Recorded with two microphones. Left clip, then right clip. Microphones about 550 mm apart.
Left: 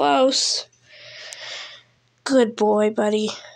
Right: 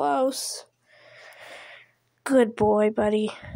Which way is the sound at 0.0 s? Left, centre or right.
Right.